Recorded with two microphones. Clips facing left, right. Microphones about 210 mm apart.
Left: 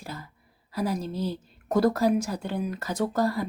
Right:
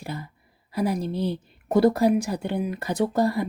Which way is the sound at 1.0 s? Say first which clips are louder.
Right 4 dB; 60° right (ahead or behind).